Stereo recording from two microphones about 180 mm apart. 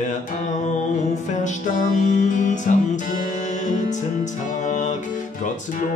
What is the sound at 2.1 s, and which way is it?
Music, 45° left (ahead or behind).